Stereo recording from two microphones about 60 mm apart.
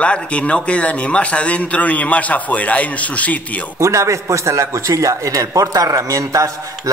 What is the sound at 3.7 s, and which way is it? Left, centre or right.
A man's voice, right.